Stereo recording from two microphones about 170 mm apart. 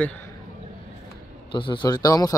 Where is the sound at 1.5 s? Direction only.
30° left (ahead or behind).